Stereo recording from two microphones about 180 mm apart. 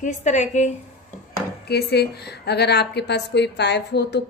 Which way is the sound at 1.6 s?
60° left (ahead or behind).